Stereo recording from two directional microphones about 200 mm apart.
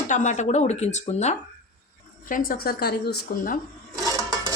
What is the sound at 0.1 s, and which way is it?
Speech, 40° left (ahead or behind).